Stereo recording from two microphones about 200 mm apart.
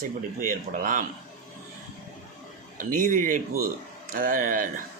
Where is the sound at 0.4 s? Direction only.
40° right (ahead or behind).